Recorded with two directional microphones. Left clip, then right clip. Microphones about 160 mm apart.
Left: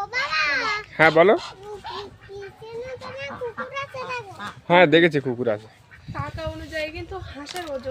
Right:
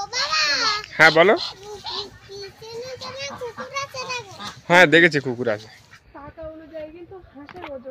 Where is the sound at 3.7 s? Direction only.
10° left (ahead or behind).